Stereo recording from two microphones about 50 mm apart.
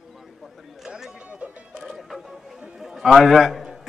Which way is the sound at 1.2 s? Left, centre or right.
Right.